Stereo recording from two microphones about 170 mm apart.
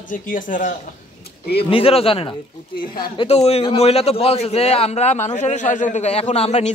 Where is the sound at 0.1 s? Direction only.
50° left (ahead or behind).